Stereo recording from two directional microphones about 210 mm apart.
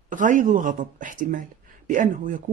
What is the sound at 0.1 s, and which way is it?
Speech, 40° right (ahead or behind).